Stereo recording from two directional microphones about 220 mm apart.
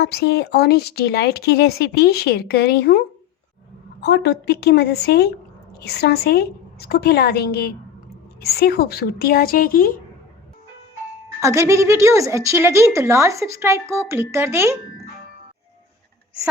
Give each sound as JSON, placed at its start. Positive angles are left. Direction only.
{"t": 0.0, "sound": "speech", "side_deg": 45}
{"t": 4.0, "sound": "speech", "side_deg": 50}
{"t": 11.3, "sound": "a woman's voice", "side_deg": -15}